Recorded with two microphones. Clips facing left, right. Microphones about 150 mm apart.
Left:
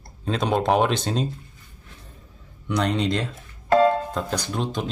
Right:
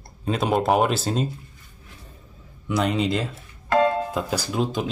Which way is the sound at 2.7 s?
5° right (ahead or behind).